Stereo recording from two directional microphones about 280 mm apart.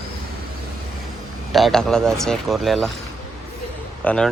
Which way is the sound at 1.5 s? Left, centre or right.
Centre.